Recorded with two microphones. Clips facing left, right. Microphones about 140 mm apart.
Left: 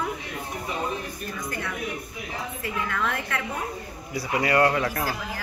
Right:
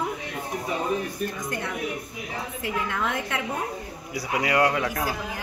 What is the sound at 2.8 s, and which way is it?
Speech, 25° right (ahead or behind).